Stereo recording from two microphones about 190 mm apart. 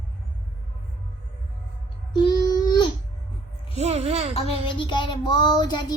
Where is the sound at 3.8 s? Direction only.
35° right (ahead or behind).